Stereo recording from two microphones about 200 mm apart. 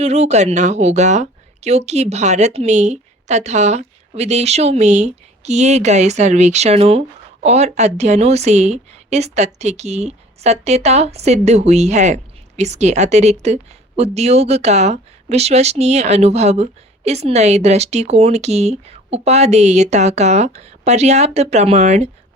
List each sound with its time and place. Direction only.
0.0 s a woman's voice: 35° right (ahead or behind)